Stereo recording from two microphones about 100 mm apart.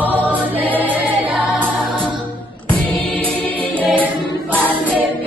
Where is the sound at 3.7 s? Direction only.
15° right (ahead or behind).